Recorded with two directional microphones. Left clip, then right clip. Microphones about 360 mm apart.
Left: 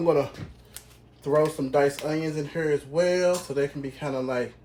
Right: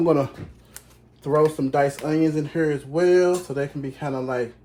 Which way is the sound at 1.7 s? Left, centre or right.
Centre.